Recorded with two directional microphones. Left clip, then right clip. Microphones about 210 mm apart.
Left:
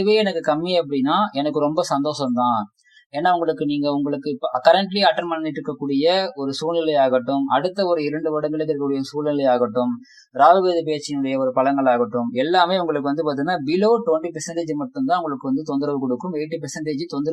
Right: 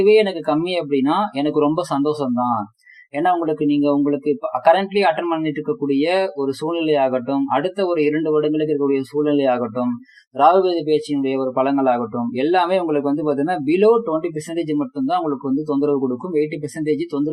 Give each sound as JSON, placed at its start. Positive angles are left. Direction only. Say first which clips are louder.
{"t": 0.0, "sound": "speech", "louder": "right 4 dB", "side_deg": 25}
{"t": 3.7, "sound": "speech", "louder": "right 4 dB", "side_deg": 25}